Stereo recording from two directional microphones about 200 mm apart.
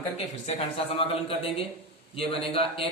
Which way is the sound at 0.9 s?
30° left (ahead or behind).